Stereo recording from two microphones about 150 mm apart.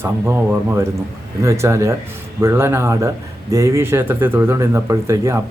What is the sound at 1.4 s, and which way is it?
Speech, 20° right (ahead or behind).